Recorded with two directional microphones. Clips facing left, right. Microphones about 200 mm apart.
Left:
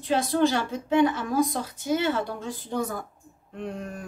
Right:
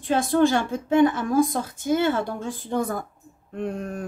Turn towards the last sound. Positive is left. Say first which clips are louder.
# right 5 dB
turn(degrees=-50)  # may be behind; listen again after turning